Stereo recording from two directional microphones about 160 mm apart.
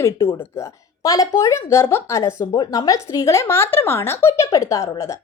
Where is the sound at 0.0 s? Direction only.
15° left (ahead or behind).